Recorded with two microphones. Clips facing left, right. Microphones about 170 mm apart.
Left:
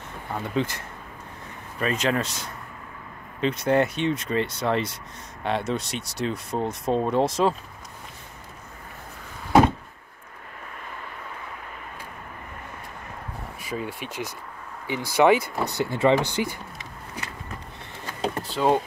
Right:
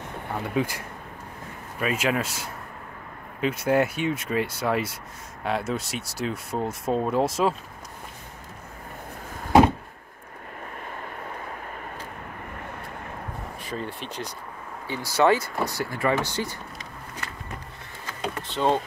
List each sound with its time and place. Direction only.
0.3 s speech: 10° right (ahead or behind)
13.6 s speech: 5° left (ahead or behind)
18.5 s speech: 5° left (ahead or behind)